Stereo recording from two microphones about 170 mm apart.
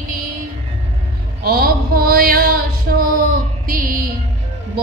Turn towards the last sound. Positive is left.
turn(degrees=-55)  # may be behind; listen again after turning